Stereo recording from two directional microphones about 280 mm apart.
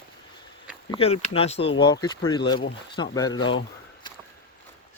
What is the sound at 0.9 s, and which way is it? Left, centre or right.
Speech, left.